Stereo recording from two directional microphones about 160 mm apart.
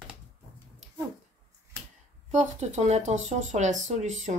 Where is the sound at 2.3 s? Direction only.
45° right (ahead or behind).